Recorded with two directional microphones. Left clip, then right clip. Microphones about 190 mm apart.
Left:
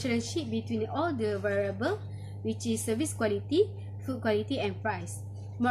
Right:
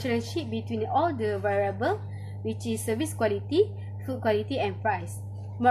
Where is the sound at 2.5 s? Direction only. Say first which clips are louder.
Right 2 dB; 50° left (ahead or behind).